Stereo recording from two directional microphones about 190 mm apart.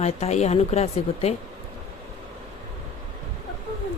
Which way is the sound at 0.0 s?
35° left (ahead or behind).